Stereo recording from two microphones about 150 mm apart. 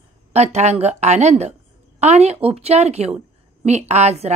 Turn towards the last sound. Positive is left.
turn(degrees=-45)  # may be behind; listen again after turning